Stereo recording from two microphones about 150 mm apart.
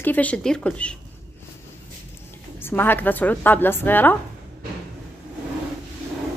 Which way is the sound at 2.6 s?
15° left (ahead or behind).